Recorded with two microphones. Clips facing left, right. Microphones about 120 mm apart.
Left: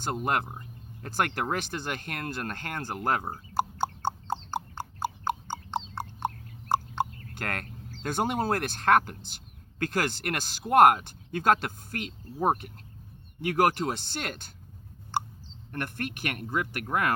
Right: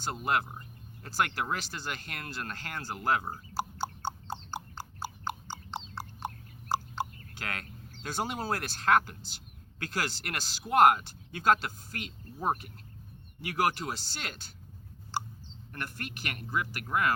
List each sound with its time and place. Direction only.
0.0 s speech: 50° left (ahead or behind)
3.5 s a sound: 50° left (ahead or behind)
8.0 s speech: 50° left (ahead or behind)
15.1 s clicking: 55° left (ahead or behind)
15.7 s speech: 55° left (ahead or behind)